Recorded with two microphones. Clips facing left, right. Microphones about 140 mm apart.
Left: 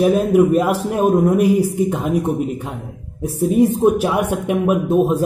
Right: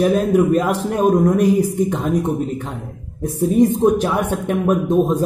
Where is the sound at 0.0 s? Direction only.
10° left (ahead or behind).